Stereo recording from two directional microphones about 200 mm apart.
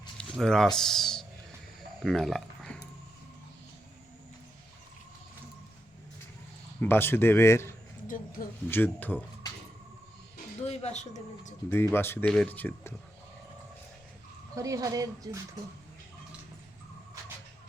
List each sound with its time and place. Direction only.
0.2 s speech: 5° left (ahead or behind)
6.7 s speech: 10° left (ahead or behind)
8.0 s speech: 45° left (ahead or behind)
8.7 s speech: 10° left (ahead or behind)
10.7 s speech: 30° left (ahead or behind)
11.7 s speech: 10° left (ahead or behind)
14.5 s speech: 15° right (ahead or behind)